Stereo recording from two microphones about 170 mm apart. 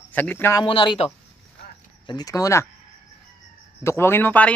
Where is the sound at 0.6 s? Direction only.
30° left (ahead or behind).